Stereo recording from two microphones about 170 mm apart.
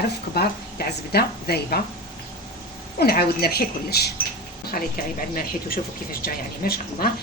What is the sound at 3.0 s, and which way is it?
Speech, 65° left (ahead or behind).